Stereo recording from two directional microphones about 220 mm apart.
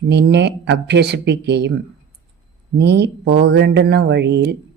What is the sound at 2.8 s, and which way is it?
Speech, 50° right (ahead or behind).